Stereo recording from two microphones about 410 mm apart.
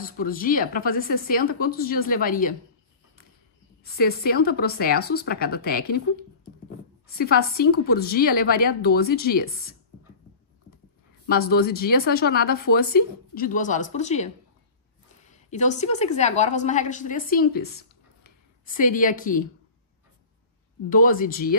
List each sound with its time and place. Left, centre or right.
0.0 s speech: left
3.8 s speech: left
7.2 s speech: left
11.2 s speech: left
15.5 s a woman's voice: centre
20.9 s speech: centre